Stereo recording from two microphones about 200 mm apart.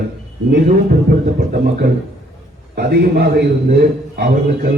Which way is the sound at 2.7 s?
50° right (ahead or behind).